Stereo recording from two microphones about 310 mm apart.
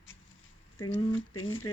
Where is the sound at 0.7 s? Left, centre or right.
Centre.